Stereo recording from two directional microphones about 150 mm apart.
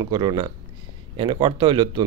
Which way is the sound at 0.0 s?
30° right (ahead or behind).